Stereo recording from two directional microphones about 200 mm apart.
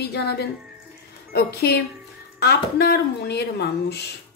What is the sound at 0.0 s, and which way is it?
Speech, 55° left (ahead or behind).